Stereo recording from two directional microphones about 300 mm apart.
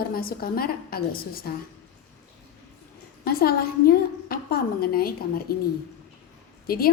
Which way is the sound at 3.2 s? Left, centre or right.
Left.